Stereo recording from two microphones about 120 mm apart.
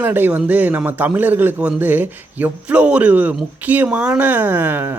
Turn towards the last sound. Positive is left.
turn(degrees=-15)  # may be behind; listen again after turning